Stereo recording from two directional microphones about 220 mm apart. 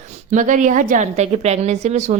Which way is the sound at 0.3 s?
35° right (ahead or behind).